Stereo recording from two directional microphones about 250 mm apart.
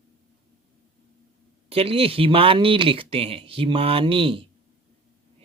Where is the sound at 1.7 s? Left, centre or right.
Right.